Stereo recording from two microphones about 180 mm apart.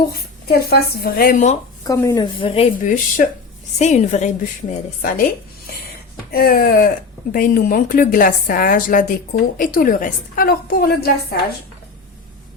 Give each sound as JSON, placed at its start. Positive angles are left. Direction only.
{"t": 0.1, "sound": "speech", "side_deg": 60}
{"t": 1.9, "sound": "a woman's voice", "side_deg": 20}
{"t": 2.8, "sound": "a woman's voice", "side_deg": 45}
{"t": 6.3, "sound": "a woman's voice", "side_deg": 55}